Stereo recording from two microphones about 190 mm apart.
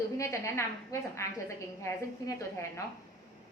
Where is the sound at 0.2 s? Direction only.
15° left (ahead or behind).